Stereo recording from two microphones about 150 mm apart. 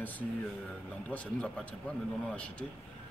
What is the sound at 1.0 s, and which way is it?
Speech, 10° left (ahead or behind).